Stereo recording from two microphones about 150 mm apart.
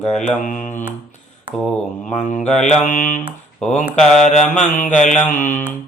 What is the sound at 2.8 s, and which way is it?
Mantra, 60° left (ahead or behind).